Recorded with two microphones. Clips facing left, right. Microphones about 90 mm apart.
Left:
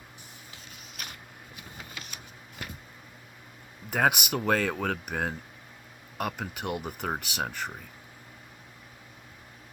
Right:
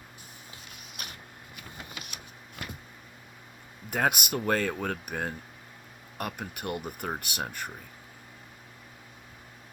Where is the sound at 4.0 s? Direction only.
15° left (ahead or behind).